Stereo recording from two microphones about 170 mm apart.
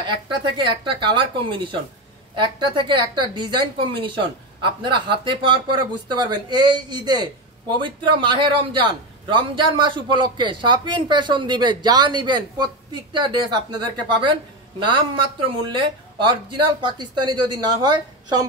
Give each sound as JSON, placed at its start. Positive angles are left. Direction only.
{"t": 0.0, "sound": "a man's voice", "side_deg": -30}